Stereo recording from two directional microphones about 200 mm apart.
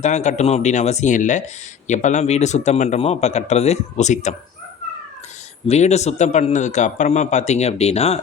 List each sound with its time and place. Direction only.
0.0 s a man's voice: 35° left (ahead or behind)
5.6 s a man's voice: 35° left (ahead or behind)